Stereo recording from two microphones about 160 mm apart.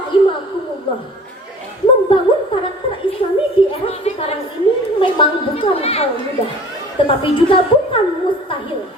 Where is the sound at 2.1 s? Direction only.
35° left (ahead or behind).